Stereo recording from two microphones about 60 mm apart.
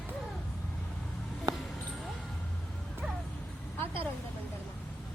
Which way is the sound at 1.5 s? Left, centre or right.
Right.